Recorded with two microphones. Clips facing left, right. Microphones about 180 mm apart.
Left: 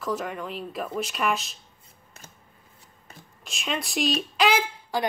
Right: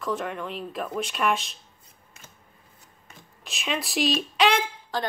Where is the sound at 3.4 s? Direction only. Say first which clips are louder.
Right 1 dB; centre (ahead or behind).